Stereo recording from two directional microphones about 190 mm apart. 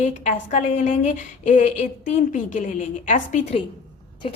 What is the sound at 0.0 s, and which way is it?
A woman's voice, 40° left (ahead or behind).